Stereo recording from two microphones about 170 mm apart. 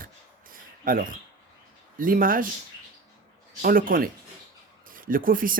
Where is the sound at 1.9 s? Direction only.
55° right (ahead or behind).